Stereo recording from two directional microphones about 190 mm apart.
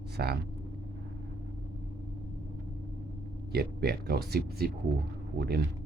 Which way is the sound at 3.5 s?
55° right (ahead or behind).